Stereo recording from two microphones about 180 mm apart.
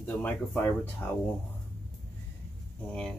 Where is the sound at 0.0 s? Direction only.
10° left (ahead or behind).